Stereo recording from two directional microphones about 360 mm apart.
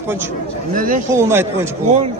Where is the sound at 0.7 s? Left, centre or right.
Right.